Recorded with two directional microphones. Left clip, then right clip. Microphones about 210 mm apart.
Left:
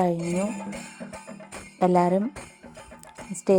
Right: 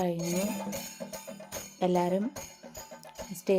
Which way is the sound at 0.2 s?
Centre (ahead or behind).